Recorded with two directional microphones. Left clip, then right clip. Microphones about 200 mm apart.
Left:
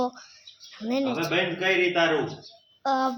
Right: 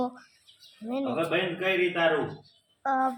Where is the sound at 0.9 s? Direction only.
20° left (ahead or behind).